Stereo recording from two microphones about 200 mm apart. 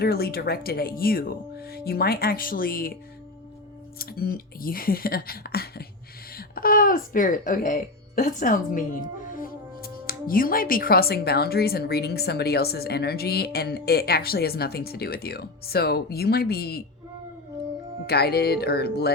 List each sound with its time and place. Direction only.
0.0 s speech: 50° left (ahead or behind)
18.0 s speech: 55° left (ahead or behind)